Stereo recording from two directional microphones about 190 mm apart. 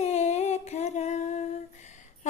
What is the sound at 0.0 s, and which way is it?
Humming, 35° left (ahead or behind).